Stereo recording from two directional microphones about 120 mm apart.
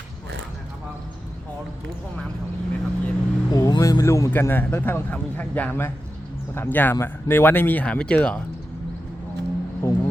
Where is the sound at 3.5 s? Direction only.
30° left (ahead or behind); by 8.4 s 10° left (ahead or behind).